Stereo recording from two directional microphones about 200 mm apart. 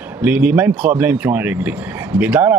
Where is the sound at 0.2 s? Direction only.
10° right (ahead or behind).